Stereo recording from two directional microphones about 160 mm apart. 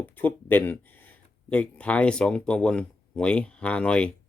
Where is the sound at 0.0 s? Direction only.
10° left (ahead or behind).